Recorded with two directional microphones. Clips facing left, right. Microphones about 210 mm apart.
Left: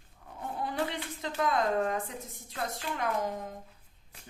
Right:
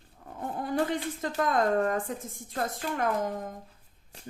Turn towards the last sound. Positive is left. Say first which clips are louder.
# right 3 dB
turn(degrees=-50)  # may be behind; listen again after turning